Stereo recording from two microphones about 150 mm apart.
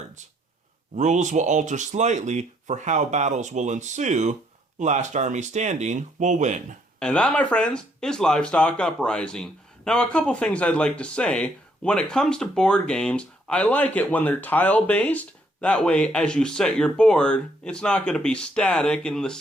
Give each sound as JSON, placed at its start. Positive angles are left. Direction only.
{"t": 0.9, "sound": "speech", "side_deg": -50}
{"t": 7.0, "sound": "speech", "side_deg": 5}